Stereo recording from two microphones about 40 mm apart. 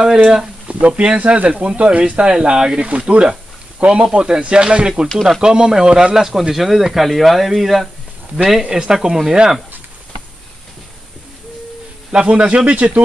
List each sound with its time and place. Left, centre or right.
0.0 s speech: centre
0.7 s speech: right
2.5 s speech: centre
2.8 s speech: right
6.1 s speech: centre
12.1 s speech: right